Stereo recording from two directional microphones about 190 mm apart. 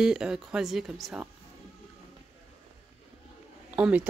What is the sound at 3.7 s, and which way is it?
Speech, 5° right (ahead or behind).